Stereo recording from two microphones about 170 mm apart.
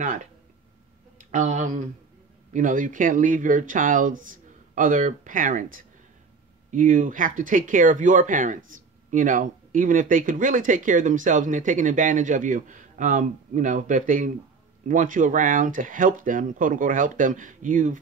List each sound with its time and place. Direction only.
0.0 s speech: 50° right (ahead or behind)
1.3 s speech: 45° right (ahead or behind)